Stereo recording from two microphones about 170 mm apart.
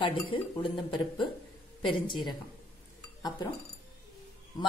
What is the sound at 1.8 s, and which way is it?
Speech, 30° left (ahead or behind).